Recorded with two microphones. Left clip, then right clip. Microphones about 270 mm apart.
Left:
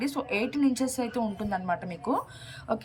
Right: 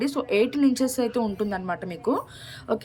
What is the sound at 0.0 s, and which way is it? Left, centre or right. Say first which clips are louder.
A woman's voice: right 7 dB; centre.